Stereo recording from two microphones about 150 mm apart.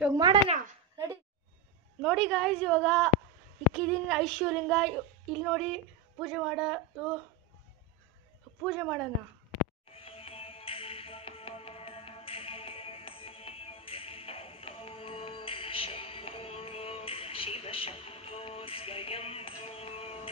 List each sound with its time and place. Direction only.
0.1 s speech: 30° right (ahead or behind)
2.0 s speech: centre (ahead or behind)
8.5 s speech: centre (ahead or behind)
9.8 s music: 40° left (ahead or behind)